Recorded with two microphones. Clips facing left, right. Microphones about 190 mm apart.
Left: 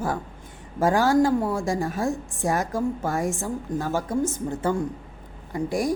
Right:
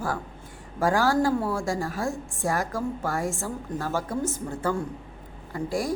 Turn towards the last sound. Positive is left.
turn(degrees=20)  # may be behind; listen again after turning